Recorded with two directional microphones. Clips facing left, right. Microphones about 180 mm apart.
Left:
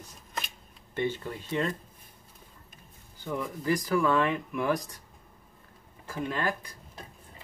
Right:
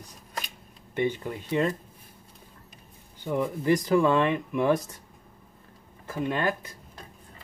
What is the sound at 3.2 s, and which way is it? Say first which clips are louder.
Speech: right 6 dB; 20° right (ahead or behind).